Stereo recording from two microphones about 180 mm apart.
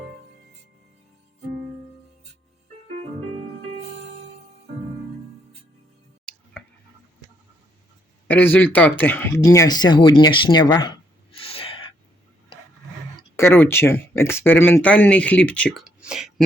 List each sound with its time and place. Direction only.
8.3 s speech: 10° left (ahead or behind); by 11.9 s 30° left (ahead or behind)
13.3 s speech: 15° left (ahead or behind); by 16.3 s 5° right (ahead or behind)